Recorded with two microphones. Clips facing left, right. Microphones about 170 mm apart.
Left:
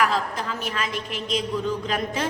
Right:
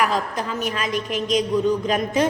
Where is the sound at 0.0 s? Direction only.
15° right (ahead or behind).